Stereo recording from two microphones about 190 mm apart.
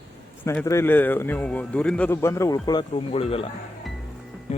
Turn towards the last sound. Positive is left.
turn(degrees=35)  # may be behind; listen again after turning